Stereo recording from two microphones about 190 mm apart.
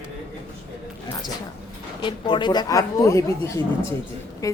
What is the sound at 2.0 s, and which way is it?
A woman's voice, 25° left (ahead or behind).